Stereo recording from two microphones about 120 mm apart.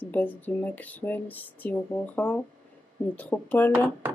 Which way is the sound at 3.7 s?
20° right (ahead or behind).